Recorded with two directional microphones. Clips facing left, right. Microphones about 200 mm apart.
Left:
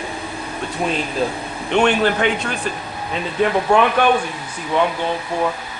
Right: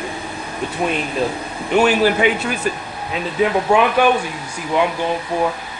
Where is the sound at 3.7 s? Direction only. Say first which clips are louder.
Even; 5° right (ahead or behind).